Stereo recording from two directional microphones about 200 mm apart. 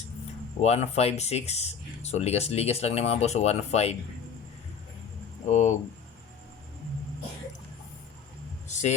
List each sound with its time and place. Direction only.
0.6 s speech: 30° left (ahead or behind)
5.5 s speech: 35° left (ahead or behind)
8.7 s a sound: 35° left (ahead or behind)